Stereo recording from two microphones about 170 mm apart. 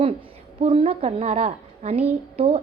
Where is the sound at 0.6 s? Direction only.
35° right (ahead or behind).